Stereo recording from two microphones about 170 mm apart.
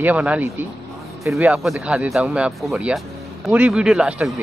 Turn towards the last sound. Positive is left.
turn(degrees=-5)  # may be behind; listen again after turning